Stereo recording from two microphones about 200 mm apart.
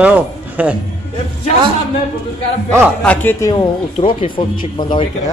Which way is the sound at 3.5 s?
25° left (ahead or behind).